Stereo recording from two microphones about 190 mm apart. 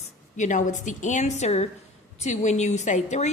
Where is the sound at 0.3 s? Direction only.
40° left (ahead or behind).